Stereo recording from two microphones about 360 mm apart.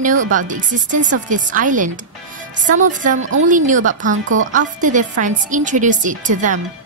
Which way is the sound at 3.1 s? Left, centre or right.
Right.